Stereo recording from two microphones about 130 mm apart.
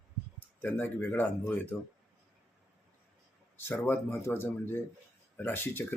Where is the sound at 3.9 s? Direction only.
15° left (ahead or behind).